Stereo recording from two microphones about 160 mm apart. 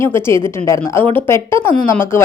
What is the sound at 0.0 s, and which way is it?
A woman's voice, 15° left (ahead or behind).